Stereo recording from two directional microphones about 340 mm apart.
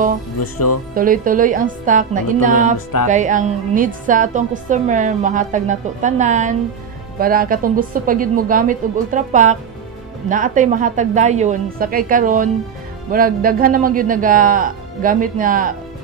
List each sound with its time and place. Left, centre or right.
0.4 s speech: left
0.9 s a woman's voice: right